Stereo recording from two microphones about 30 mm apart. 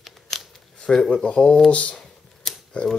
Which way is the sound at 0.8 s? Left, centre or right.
Centre.